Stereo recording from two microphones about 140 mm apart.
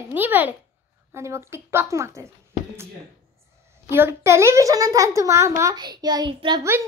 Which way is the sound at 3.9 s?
15° right (ahead or behind).